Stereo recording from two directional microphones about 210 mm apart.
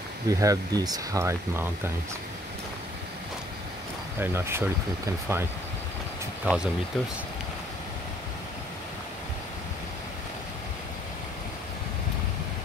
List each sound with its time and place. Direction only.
0.3 s speech: 15° right (ahead or behind)
4.2 s speech: 10° right (ahead or behind)
6.4 s speech: 5° right (ahead or behind)